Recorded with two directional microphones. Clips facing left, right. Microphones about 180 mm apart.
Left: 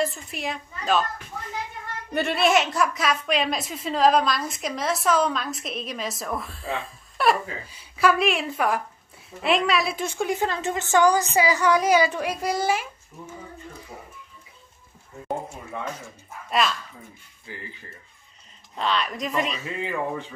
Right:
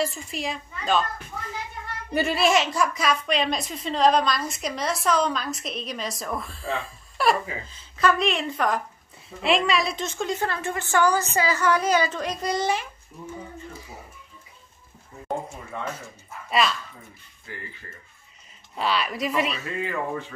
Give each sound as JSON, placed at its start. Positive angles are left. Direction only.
{"t": 0.0, "sound": "a woman's voice", "side_deg": 0}
{"t": 2.1, "sound": "a woman's voice", "side_deg": 0}
{"t": 16.4, "sound": "speech", "side_deg": 0}
{"t": 18.8, "sound": "a woman's voice", "side_deg": -5}
{"t": 19.6, "sound": "a woman's voice", "side_deg": 15}